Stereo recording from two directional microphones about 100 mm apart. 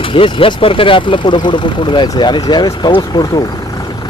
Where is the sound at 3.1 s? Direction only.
70° left (ahead or behind).